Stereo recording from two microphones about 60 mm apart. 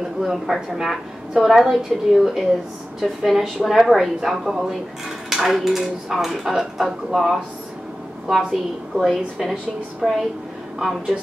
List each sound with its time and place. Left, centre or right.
0.2 s a woman's voice: centre